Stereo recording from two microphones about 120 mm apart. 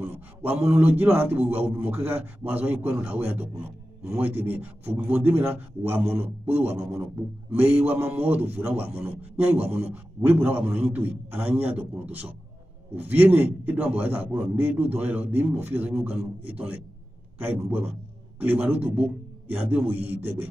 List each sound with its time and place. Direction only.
0.0 s a man's voice: 15° right (ahead or behind)
20.0 s speech: 55° right (ahead or behind)